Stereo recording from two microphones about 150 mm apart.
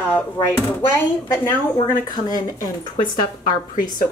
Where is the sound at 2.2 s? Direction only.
25° left (ahead or behind).